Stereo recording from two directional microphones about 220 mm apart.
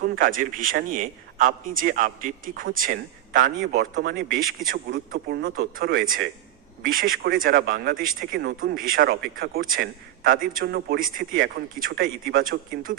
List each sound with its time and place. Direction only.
0.0 s speech: 40° right (ahead or behind)
5.1 s speech: 55° right (ahead or behind)
5.7 s speech: 40° right (ahead or behind)